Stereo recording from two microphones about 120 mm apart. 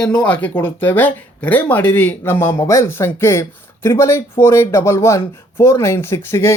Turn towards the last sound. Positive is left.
turn(degrees=20)  # may be behind; listen again after turning